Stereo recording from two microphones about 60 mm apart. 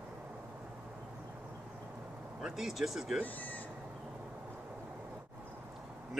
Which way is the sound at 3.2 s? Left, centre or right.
Left.